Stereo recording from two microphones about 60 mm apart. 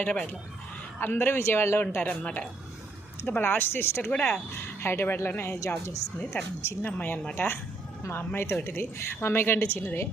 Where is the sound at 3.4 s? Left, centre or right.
Left.